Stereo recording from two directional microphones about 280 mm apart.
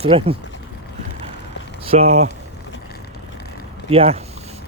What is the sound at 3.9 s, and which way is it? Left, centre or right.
Speech, right.